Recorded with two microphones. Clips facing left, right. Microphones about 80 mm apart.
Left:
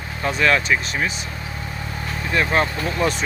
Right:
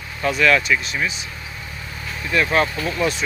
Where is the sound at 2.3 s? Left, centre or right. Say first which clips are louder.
Right 1 dB; left.